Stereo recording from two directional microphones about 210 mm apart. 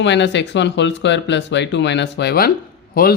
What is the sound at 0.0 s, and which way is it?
Speech, 55° left (ahead or behind).